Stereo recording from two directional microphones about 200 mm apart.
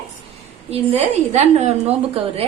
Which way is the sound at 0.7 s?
30° right (ahead or behind).